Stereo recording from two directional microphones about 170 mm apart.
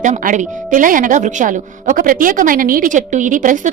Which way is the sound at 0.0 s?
50° right (ahead or behind).